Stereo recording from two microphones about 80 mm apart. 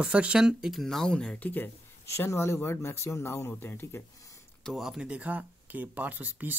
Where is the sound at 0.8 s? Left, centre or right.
Centre.